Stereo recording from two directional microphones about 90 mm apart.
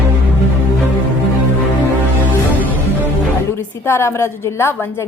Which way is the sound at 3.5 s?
30° left (ahead or behind).